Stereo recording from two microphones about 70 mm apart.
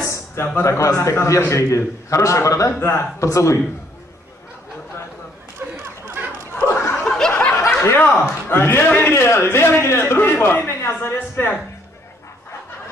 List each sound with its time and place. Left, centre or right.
0.0 s a sound: left
0.6 s a man's voice: left
2.8 s a man's voice: left
3.3 s a man's voice: left
5.6 s chatter: right
6.6 s laughter: left
7.1 s snicker: centre
7.8 s a man's voice: left
9.1 s a man's voice: left